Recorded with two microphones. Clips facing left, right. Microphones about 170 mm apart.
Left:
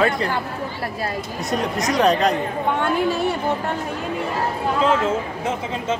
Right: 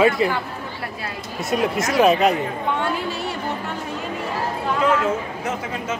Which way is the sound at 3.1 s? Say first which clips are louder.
Left 6 dB; 55° left (ahead or behind).